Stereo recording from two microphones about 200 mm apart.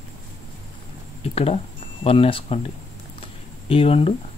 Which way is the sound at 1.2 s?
30° left (ahead or behind).